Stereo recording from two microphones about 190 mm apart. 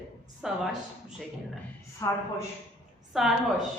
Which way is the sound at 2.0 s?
15° left (ahead or behind).